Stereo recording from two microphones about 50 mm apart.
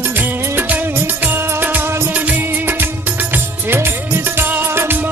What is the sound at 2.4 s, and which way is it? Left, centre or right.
Music of bollywood, right.